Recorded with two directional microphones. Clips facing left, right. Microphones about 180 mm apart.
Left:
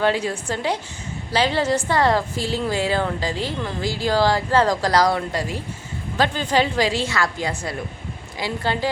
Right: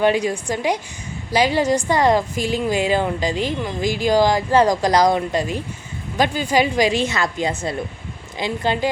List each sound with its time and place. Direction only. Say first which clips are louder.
0.0 s a woman's voice: right 3 dB; 15° right (ahead or behind)